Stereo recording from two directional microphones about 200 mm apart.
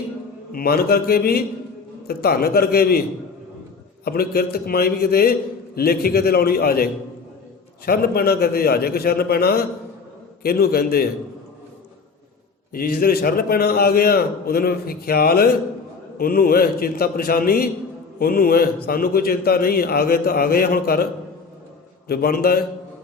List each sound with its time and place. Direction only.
0.5 s a man's voice: 50° left (ahead or behind)
4.0 s a man's voice: 50° left (ahead or behind)
7.9 s a man's voice: 50° left (ahead or behind)
12.7 s a man's voice: 45° left (ahead or behind)